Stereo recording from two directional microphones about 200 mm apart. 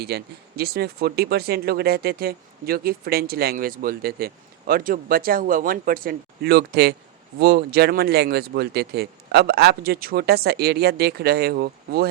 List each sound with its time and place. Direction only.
0.0 s speech: 50° right (ahead or behind)